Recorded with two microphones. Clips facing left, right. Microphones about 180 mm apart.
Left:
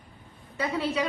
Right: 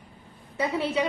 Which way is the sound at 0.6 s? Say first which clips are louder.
Right 2 dB; 25° right (ahead or behind).